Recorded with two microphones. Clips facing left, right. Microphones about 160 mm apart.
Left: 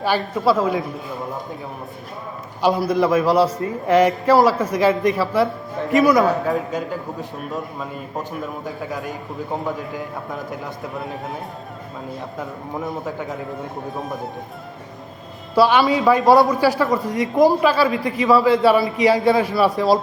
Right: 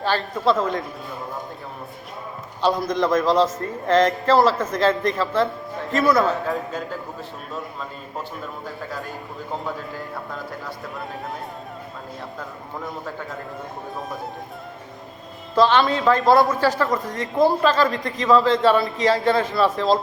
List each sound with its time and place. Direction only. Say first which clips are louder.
0.0 s a man's voice: left 2 dB; 10° left (ahead or behind)
2.6 s a man's voice: left 3 dB; 10° left (ahead or behind)
12.7 s a man's voice: left 5 dB; 15° left (ahead or behind)
13.9 s speech: left 2 dB; centre (ahead or behind)
15.5 s a man's voice: left 2 dB; 10° left (ahead or behind)